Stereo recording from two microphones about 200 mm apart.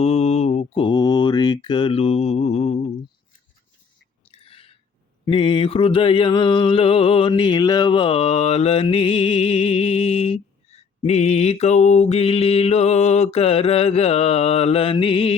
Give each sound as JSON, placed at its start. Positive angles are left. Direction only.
{"t": 0.0, "sound": "mantra", "side_deg": 30}
{"t": 4.3, "sound": "chewing", "side_deg": 30}
{"t": 5.2, "sound": "mantra", "side_deg": 25}